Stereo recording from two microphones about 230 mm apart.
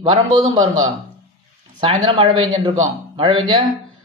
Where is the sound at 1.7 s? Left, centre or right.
Centre.